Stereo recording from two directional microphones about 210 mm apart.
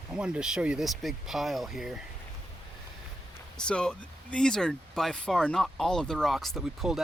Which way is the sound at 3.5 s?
5° left (ahead or behind).